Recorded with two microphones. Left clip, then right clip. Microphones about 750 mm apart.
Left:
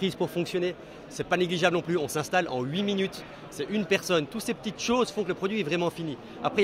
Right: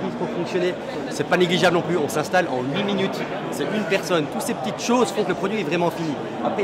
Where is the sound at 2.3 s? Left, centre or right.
Left.